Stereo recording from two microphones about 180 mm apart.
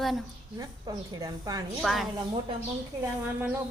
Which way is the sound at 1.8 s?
Centre (ahead or behind).